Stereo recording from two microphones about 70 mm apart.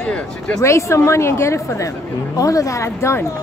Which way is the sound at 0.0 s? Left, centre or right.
Centre.